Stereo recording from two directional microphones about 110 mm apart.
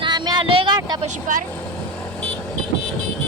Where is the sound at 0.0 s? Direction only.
40° right (ahead or behind).